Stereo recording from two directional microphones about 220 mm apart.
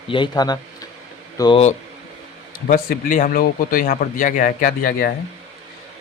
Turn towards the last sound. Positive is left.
turn(degrees=40)  # may be behind; listen again after turning